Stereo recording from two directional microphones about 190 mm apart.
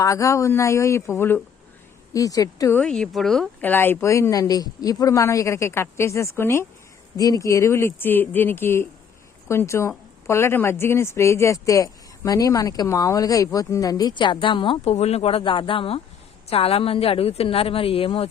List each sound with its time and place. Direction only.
0.0 s speech: 15° left (ahead or behind)